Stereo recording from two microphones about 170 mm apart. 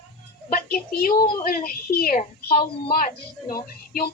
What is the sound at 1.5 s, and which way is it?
A woman's voice, 60° left (ahead or behind).